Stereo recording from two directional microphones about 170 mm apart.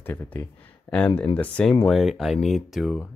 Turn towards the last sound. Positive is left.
turn(degrees=0)  # may be behind; listen again after turning